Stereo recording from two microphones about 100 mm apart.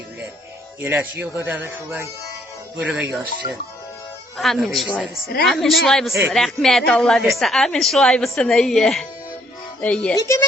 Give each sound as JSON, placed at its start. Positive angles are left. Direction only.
{"t": 0.8, "sound": "speech", "side_deg": -20}
{"t": 4.4, "sound": "a woman's voice", "side_deg": 0}
{"t": 10.2, "sound": "a woman's voice", "side_deg": 35}